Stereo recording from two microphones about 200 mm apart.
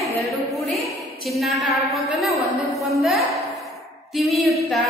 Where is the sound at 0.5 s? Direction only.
Centre (ahead or behind).